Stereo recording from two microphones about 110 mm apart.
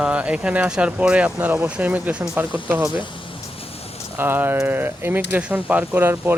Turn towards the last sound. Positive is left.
turn(degrees=-20)  # may be behind; listen again after turning